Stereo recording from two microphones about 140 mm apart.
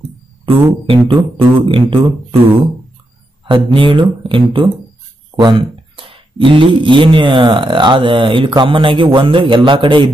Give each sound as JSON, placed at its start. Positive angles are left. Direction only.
{"t": 0.7, "sound": "speech", "side_deg": -40}
{"t": 3.4, "sound": "speech", "side_deg": -35}